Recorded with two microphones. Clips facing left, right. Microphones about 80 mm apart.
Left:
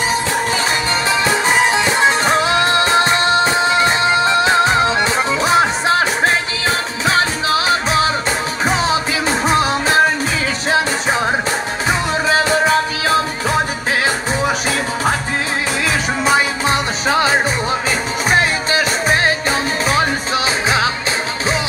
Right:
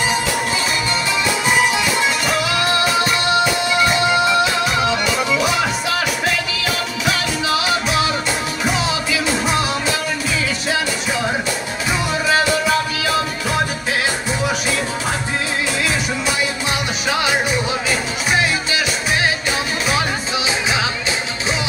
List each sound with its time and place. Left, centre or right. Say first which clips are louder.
1.2 s music: left 1 dB; left
12.3 s music: left 2 dB; left
16.3 s music: left 9 dB; left